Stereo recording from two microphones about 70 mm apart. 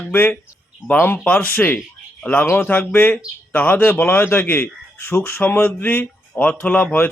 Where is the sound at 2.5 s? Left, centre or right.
Left.